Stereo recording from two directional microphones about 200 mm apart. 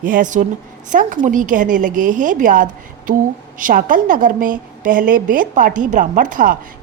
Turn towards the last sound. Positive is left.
turn(degrees=-40)  # may be behind; listen again after turning